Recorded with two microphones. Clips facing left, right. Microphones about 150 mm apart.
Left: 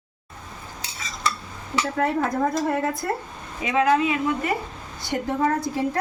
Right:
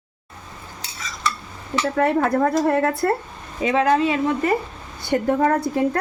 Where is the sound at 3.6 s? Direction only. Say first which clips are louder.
Right 2 dB; 35° right (ahead or behind).